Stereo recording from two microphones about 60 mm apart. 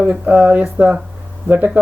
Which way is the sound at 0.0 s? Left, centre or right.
Right.